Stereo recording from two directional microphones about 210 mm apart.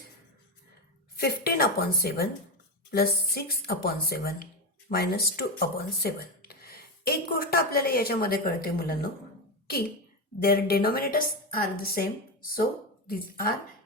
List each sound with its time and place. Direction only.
1.2 s speech: 45° left (ahead or behind)
10.4 s speech: 45° left (ahead or behind)